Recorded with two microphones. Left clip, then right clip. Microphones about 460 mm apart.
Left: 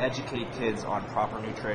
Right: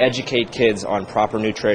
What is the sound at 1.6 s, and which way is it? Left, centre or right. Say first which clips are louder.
Speech: right 14 dB; right.